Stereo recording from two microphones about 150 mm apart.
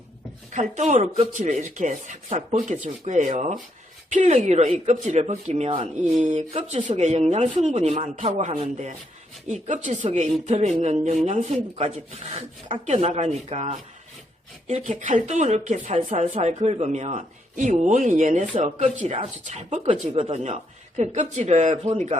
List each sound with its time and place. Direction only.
0.5 s speech: 55° right (ahead or behind)
6.1 s speech: 55° right (ahead or behind)